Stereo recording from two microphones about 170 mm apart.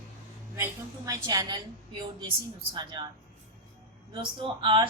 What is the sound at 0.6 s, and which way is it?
A woman's voice, 20° right (ahead or behind).